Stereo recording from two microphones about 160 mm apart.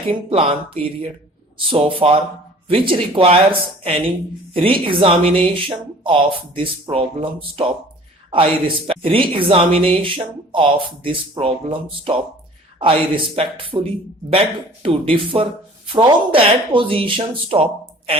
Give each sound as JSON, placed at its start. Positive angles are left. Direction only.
{"t": 0.3, "sound": "speech", "side_deg": -35}